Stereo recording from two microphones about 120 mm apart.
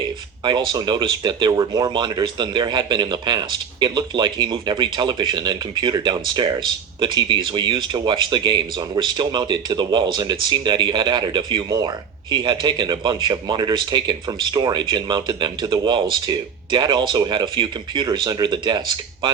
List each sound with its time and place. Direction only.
0.4 s speech: 40° right (ahead or behind)